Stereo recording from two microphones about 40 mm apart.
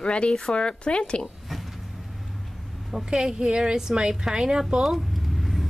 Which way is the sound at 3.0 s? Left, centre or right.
Right.